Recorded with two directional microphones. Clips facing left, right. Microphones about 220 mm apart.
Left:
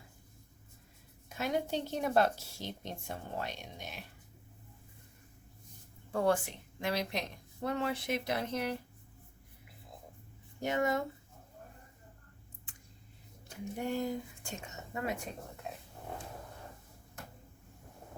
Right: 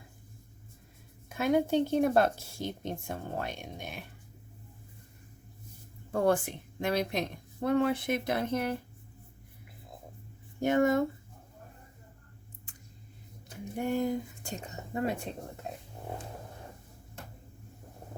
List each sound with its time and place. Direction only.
1.3 s a woman's voice: 50° right (ahead or behind)
6.1 s a woman's voice: 50° right (ahead or behind)
10.6 s a woman's voice: 50° right (ahead or behind)
13.8 s speech: 50° right (ahead or behind)
14.5 s a woman's voice: 35° right (ahead or behind)